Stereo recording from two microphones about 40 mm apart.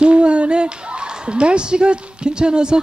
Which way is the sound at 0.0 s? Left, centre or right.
Right.